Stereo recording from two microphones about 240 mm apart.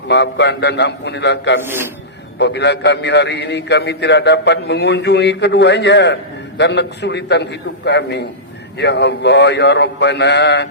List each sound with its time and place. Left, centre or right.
0.1 s a man's voice: left
1.6 s a man's voice: centre
2.4 s a man's voice: left